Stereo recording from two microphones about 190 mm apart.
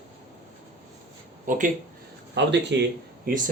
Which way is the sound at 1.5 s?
45° right (ahead or behind).